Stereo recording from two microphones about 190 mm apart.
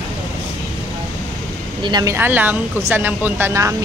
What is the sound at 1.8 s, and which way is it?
Speech, 20° right (ahead or behind).